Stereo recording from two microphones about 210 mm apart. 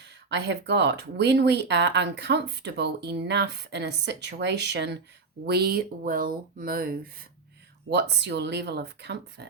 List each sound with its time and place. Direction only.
0.3 s speech: 55° right (ahead or behind)